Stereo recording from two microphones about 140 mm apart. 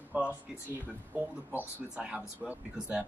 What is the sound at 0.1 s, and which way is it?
Speech, 10° right (ahead or behind).